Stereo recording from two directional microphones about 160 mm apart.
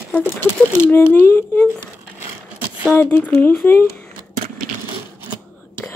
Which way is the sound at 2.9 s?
10° left (ahead or behind).